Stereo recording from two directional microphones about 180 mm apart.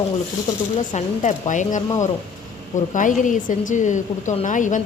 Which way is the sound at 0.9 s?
45° left (ahead or behind).